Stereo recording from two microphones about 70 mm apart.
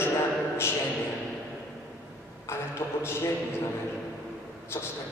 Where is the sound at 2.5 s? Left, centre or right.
Left.